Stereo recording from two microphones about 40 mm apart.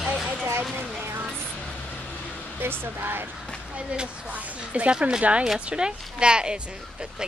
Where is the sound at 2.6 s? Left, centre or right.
Right.